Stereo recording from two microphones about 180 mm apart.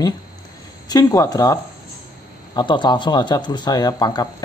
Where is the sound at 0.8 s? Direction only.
20° left (ahead or behind).